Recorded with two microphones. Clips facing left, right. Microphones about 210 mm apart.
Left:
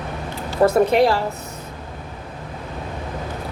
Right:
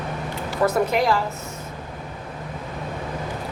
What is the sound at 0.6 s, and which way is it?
Speech, 30° left (ahead or behind).